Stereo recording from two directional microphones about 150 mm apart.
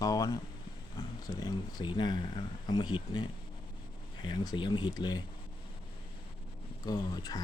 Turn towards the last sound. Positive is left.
turn(degrees=25)  # may be behind; listen again after turning